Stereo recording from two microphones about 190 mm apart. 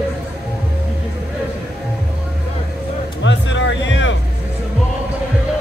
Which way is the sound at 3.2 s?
75° left (ahead or behind).